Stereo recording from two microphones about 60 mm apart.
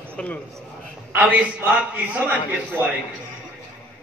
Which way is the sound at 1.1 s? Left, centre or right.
Right.